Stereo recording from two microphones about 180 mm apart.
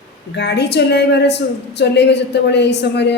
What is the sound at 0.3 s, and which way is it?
A woman's voice, 70° left (ahead or behind).